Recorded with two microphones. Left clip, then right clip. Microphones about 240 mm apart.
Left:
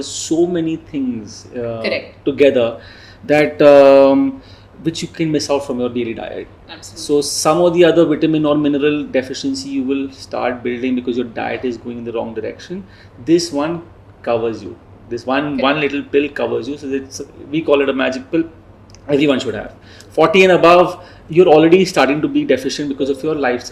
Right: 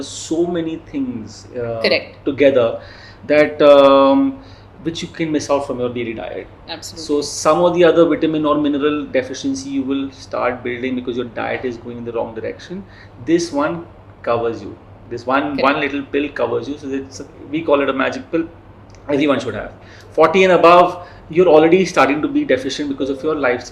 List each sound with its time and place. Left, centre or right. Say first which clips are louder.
0.1 s speech: left 3 dB; left
6.7 s speech: right 5 dB; right
6.9 s speech: left 4 dB; left
15.6 s speech: even; left